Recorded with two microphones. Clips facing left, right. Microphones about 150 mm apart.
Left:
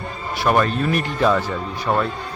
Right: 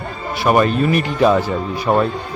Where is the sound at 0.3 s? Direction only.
10° right (ahead or behind).